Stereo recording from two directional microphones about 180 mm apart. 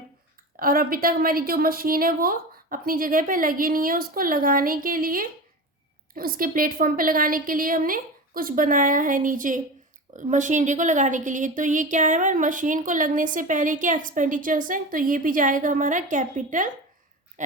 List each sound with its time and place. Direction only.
0.5 s a woman's voice: 55° right (ahead or behind)